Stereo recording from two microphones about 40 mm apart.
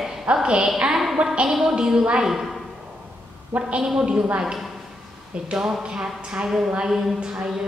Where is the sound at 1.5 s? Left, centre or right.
Centre.